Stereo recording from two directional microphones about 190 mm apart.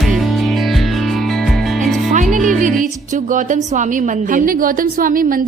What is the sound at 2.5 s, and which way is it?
A woman's voice, 45° right (ahead or behind).